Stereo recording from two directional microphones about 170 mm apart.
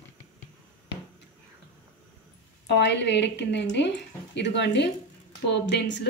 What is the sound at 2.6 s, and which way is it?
A woman's voice, 85° left.